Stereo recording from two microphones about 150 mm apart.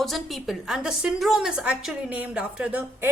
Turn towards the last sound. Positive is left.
turn(degrees=-10)  # may be behind; listen again after turning